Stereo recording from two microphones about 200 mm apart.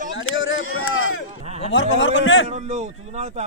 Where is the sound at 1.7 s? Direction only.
70° left (ahead or behind).